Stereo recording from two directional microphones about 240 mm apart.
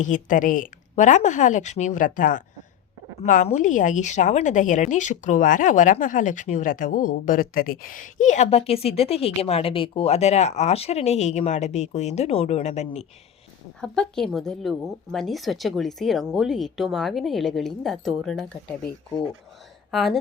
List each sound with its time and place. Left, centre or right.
0.0 s a woman's voice: left
13.8 s a woman's voice: centre
19.9 s speech: centre